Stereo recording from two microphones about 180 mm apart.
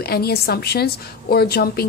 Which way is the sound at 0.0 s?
60° left (ahead or behind).